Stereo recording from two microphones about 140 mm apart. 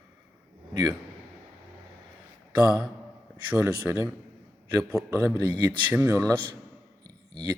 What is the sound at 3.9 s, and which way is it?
A man's voice, 20° right (ahead or behind).